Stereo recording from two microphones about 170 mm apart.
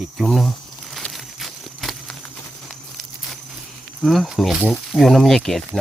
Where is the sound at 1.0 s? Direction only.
Centre (ahead or behind).